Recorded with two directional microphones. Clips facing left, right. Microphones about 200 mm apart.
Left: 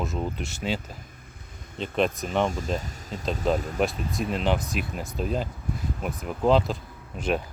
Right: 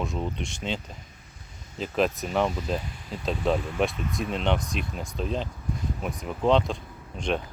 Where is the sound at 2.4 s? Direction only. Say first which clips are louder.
Even; 45° left (ahead or behind).